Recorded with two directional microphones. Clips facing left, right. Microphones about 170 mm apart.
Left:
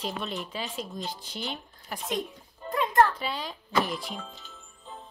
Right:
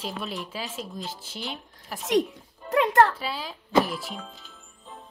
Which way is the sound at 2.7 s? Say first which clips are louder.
Right 3 dB; 75° right (ahead or behind).